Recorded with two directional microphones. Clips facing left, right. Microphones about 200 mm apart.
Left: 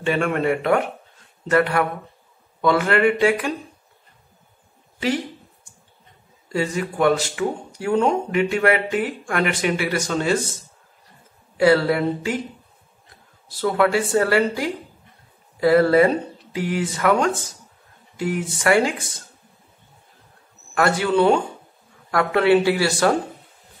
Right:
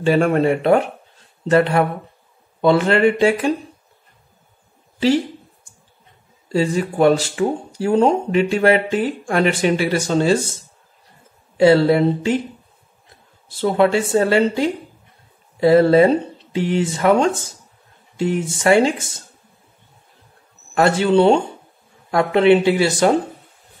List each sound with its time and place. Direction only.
0.0 s speech: 35° right (ahead or behind)
6.5 s speech: 30° right (ahead or behind)
13.5 s speech: 25° right (ahead or behind)
20.7 s speech: 25° right (ahead or behind)